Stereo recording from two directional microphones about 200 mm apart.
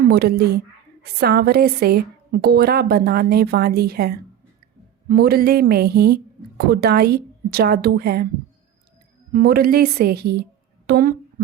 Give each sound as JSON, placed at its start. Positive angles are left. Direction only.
{"t": 0.0, "sound": "a woman's voice", "side_deg": -50}
{"t": 9.3, "sound": "a woman's voice", "side_deg": -50}